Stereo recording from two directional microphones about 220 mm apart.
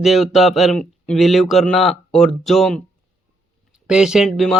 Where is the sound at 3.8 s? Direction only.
5° right (ahead or behind).